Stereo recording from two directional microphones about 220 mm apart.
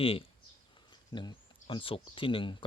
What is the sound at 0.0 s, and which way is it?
Speech, 25° left (ahead or behind).